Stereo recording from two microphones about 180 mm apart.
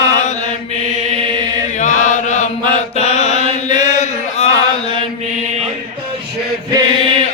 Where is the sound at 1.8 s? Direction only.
40° left (ahead or behind).